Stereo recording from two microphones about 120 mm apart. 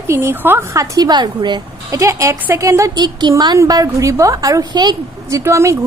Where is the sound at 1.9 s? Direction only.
25° right (ahead or behind).